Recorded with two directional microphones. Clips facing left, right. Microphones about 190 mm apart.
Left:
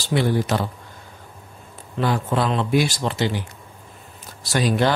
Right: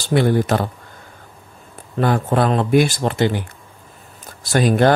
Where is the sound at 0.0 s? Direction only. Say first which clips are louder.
Right 4 dB; 55° right (ahead or behind).